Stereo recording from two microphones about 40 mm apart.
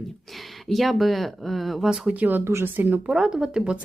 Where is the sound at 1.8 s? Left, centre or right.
Centre.